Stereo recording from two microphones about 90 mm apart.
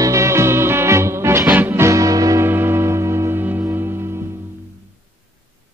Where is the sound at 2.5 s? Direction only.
25° right (ahead or behind).